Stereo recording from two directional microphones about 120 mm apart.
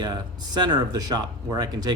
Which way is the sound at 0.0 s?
35° right (ahead or behind).